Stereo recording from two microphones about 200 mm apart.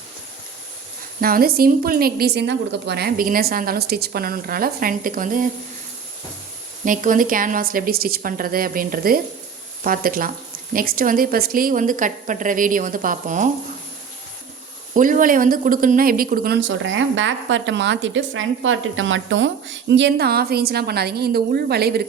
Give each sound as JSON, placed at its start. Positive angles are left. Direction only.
{"t": 1.2, "sound": "a woman's voice", "side_deg": -50}
{"t": 6.8, "sound": "a woman's voice", "side_deg": -40}
{"t": 14.9, "sound": "a woman's voice", "side_deg": -40}
{"t": 16.6, "sound": "a woman's voice", "side_deg": -70}